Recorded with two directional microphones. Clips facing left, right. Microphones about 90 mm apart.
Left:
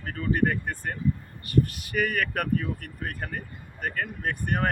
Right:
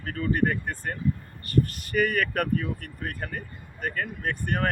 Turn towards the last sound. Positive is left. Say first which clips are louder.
# even
turn(degrees=10)  # may be behind; listen again after turning